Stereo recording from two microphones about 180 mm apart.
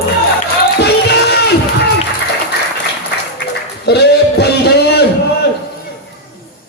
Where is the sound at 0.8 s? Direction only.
65° left (ahead or behind).